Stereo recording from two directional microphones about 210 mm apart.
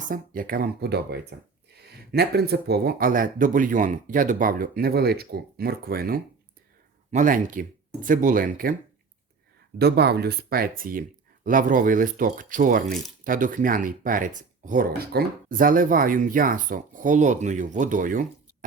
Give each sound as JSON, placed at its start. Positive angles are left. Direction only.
{"t": 0.1, "sound": "speech", "side_deg": -45}
{"t": 9.7, "sound": "speech", "side_deg": -50}